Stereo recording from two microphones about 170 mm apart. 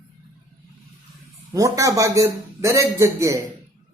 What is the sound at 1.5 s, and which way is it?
A man's voice, 20° right (ahead or behind).